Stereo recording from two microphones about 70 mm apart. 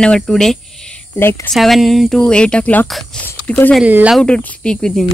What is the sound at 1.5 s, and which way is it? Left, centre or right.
Speech, centre.